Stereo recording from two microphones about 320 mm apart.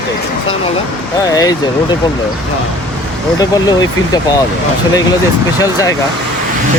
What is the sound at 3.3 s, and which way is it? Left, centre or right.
Speech, centre.